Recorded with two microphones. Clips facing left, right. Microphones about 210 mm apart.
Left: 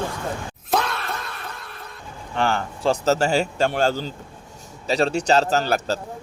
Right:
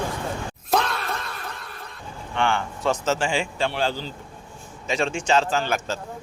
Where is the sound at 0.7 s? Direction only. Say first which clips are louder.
Even; centre (ahead or behind).